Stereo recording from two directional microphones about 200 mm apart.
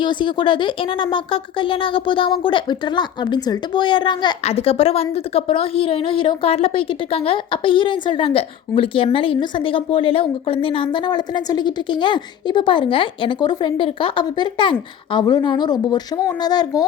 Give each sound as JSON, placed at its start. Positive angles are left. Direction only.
{"t": 0.0, "sound": "speech", "side_deg": 25}